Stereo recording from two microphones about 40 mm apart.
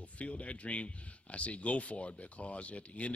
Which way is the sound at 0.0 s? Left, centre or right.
Left.